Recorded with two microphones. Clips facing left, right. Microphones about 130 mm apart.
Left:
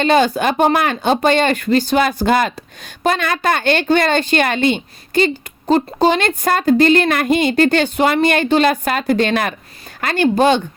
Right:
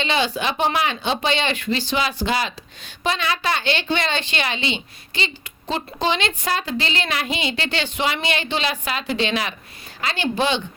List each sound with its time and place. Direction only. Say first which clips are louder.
0.0 s a woman's voice: left 8 dB; 50° left (ahead or behind)